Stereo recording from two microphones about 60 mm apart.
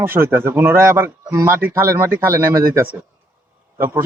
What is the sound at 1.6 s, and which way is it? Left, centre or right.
A man's voice, right.